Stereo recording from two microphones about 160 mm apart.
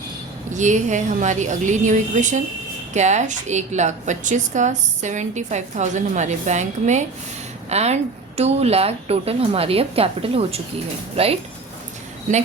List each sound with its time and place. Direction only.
0.5 s a woman's voice: 50° right (ahead or behind)